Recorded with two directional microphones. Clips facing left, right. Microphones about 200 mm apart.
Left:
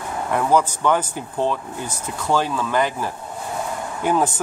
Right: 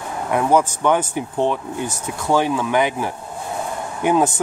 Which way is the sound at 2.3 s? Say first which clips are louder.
Right 3 dB; 15° right (ahead or behind).